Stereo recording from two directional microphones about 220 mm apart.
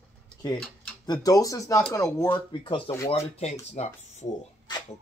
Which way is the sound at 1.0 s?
15° left (ahead or behind).